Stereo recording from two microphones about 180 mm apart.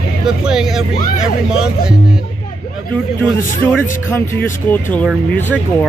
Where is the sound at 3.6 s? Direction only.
10° left (ahead or behind).